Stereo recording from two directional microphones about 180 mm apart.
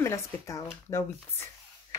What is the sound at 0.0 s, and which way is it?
Speech, 15° left (ahead or behind).